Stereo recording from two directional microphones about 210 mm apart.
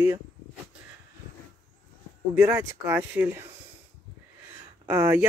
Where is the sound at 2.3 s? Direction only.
5° right (ahead or behind).